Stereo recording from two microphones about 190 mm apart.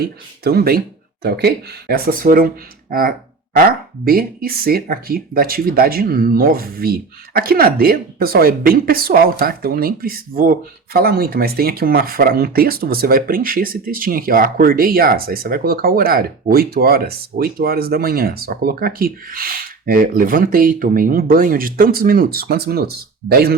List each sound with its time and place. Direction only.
0.0 s speech: 55° right (ahead or behind)